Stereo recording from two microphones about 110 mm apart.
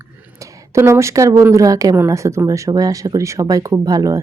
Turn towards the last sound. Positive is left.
turn(degrees=-30)  # may be behind; listen again after turning